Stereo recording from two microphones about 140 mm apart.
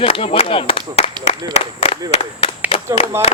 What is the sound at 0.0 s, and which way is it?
Speech, 45° left (ahead or behind).